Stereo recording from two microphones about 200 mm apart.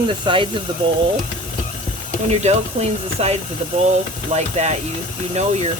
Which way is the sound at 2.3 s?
35° right (ahead or behind).